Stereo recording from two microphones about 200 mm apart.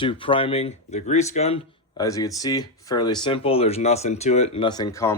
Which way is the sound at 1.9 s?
15° left (ahead or behind).